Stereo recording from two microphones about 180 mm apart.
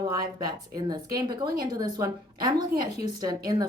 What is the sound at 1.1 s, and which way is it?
A woman's voice, 25° right (ahead or behind).